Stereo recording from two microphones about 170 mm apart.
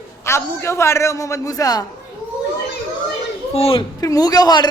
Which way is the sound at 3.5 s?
35° left (ahead or behind).